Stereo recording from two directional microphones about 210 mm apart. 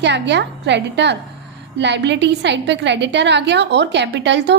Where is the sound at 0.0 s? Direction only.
55° right (ahead or behind).